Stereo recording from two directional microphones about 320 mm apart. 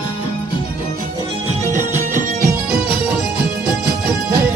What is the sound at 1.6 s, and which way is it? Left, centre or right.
Music, right.